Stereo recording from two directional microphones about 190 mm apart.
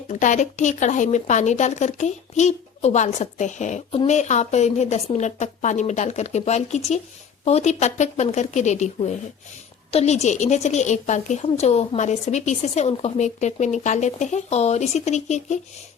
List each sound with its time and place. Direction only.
0.1 s speech: 40° left (ahead or behind)